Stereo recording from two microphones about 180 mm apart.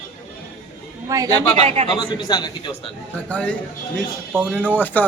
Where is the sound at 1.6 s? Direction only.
35° right (ahead or behind).